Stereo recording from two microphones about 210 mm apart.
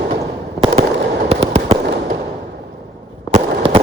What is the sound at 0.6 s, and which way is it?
Fireworks, 35° right (ahead or behind).